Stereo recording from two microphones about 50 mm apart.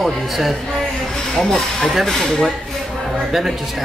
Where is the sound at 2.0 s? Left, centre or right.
Centre.